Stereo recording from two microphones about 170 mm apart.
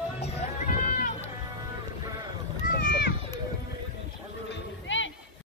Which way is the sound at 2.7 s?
75° left (ahead or behind).